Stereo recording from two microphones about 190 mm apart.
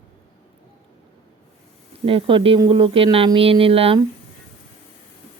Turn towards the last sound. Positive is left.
turn(degrees=-30)  # may be behind; listen again after turning